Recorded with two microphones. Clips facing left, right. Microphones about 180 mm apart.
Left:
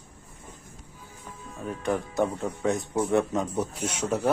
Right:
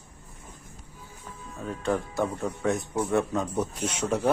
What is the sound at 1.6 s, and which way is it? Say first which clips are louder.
A man's voice: even; 15° left (ahead or behind).